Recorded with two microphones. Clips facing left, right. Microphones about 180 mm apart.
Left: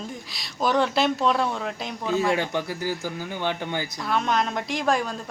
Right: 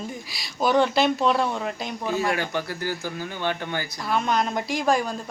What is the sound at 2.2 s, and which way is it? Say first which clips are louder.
Speech: left 3 dB; 20° left (ahead or behind).